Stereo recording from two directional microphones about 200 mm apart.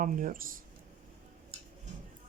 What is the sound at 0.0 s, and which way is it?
Speech, 40° right (ahead or behind).